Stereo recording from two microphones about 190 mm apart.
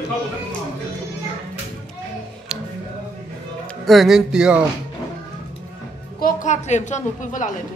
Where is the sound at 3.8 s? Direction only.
Centre (ahead or behind).